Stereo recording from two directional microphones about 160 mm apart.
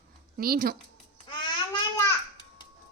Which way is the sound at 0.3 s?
70° right (ahead or behind).